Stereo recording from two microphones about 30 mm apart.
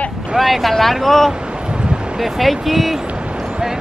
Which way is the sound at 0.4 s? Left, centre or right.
Centre.